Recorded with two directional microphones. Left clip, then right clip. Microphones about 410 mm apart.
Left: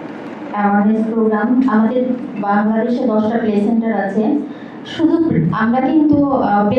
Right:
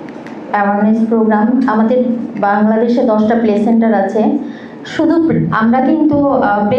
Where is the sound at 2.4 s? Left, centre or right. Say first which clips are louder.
Right 5 dB; right.